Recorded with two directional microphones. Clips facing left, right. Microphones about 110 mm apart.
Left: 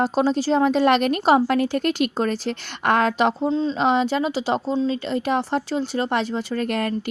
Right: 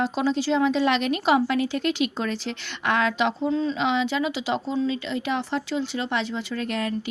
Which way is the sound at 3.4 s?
30° left (ahead or behind).